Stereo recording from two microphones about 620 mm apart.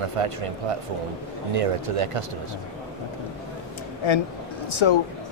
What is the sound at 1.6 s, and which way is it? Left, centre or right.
Speech, right.